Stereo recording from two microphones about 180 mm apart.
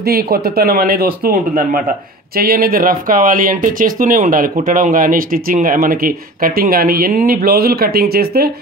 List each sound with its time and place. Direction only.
0.0 s speech: 60° right (ahead or behind)